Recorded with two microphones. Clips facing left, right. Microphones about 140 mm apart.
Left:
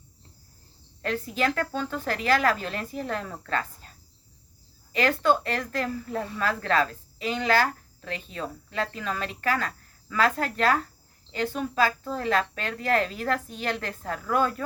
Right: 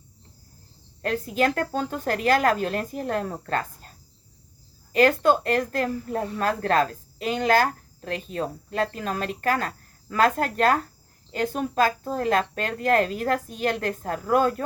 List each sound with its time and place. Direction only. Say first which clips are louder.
1.0 s speech: right 3 dB; 45° right (ahead or behind)